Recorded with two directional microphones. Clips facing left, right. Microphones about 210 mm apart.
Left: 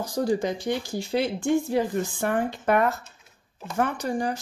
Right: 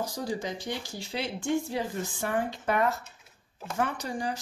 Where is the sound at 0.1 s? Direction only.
55° left (ahead or behind).